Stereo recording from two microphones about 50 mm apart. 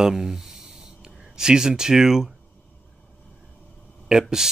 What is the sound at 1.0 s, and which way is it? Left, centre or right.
Speech, centre.